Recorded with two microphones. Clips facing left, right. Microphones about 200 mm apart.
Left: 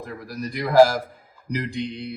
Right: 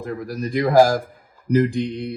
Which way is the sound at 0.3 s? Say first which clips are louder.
Right 6 dB; 50° right (ahead or behind).